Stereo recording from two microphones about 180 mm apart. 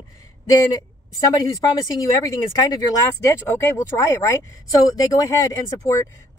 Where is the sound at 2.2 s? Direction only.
20° left (ahead or behind).